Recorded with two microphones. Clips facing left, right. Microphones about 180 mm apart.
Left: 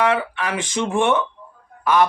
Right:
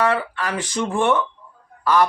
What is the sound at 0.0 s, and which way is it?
A woman's voice, 20° left (ahead or behind).